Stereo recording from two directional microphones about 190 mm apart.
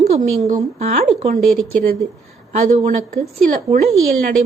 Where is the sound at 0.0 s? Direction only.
40° right (ahead or behind).